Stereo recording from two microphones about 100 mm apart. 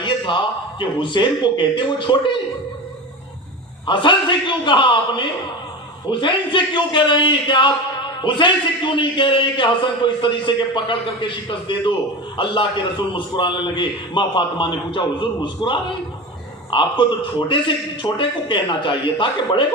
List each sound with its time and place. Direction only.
0.0 s a man's voice: 55° left (ahead or behind)
3.8 s a man's voice: 55° left (ahead or behind)